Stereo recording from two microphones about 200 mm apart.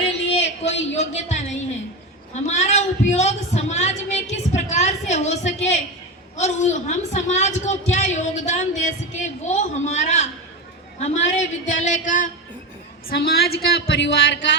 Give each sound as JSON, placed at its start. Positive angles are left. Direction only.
{"t": 0.3, "sound": "a sound", "side_deg": 35}
{"t": 2.3, "sound": "a woman's voice", "side_deg": 35}
{"t": 11.3, "sound": "a woman's voice", "side_deg": 35}